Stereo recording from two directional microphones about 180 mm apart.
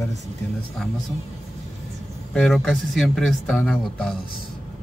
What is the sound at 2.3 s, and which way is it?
Speech, centre (ahead or behind).